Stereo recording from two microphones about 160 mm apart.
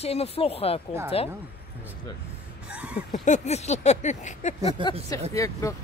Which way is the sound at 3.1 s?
45° left (ahead or behind).